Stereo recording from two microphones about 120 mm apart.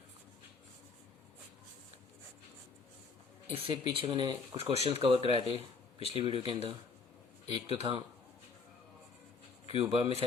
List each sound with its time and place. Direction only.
3.5 s speech: 50° right (ahead or behind)
4.5 s speech: 55° right (ahead or behind)
9.6 s a man's voice: 55° right (ahead or behind)